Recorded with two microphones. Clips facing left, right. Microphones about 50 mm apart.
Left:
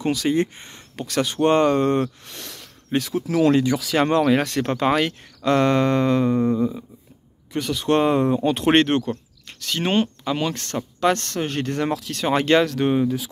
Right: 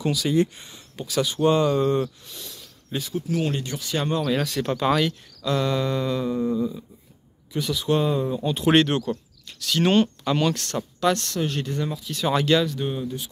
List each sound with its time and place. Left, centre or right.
0.0 s speech: left
0.9 s speech: left
3.9 s speech: left
4.2 s speech: left
4.6 s speech: left
8.6 s speech: left
9.8 s speech: centre
10.5 s speech: left
11.7 s speech: left
12.3 s speech: left
12.6 s speech: left